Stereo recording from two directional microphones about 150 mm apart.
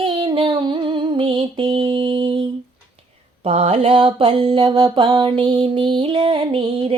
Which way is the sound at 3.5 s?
40° right (ahead or behind).